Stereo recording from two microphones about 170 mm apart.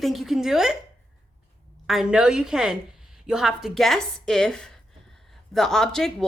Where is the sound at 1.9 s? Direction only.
5° right (ahead or behind).